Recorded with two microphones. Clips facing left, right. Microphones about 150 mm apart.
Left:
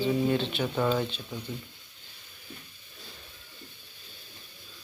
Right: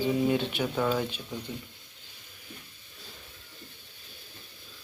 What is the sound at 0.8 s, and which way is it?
Speech, centre (ahead or behind).